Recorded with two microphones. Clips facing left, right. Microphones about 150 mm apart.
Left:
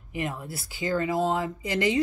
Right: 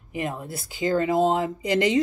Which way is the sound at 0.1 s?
20° right (ahead or behind).